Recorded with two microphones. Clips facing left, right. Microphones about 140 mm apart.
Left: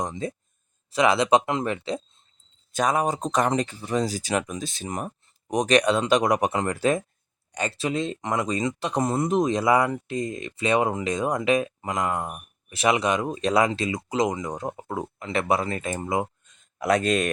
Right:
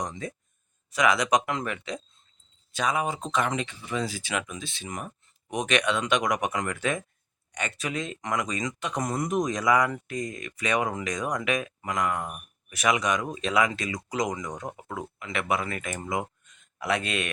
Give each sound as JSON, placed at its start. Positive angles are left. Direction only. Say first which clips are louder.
{"t": 0.0, "sound": "speech", "louder": "left 4 dB", "side_deg": 25}
{"t": 2.7, "sound": "speech", "louder": "left 4 dB", "side_deg": 45}
{"t": 16.7, "sound": "speech", "louder": "left 7 dB", "side_deg": 40}